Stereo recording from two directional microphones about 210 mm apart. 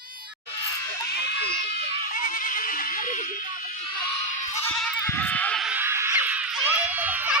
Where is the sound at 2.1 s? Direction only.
40° left (ahead or behind).